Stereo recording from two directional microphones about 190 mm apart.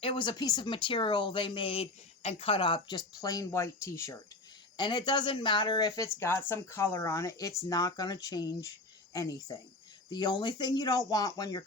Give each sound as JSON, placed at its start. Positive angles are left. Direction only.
{"t": 0.0, "sound": "speech", "side_deg": 25}